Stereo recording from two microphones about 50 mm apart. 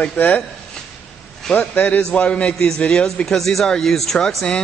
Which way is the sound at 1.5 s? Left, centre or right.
Left.